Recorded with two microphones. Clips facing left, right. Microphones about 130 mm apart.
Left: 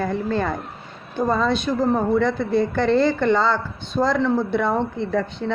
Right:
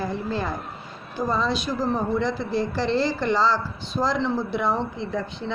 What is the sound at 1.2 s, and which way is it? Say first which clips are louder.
A woman's voice: left 4 dB; 55° left (ahead or behind).